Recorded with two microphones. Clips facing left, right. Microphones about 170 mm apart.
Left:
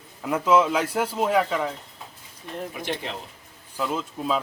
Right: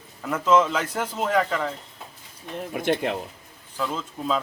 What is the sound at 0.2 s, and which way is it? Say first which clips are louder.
Speech: even; 10° left (ahead or behind).